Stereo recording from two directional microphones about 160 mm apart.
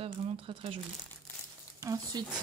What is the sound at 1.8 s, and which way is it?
Speech, 20° right (ahead or behind).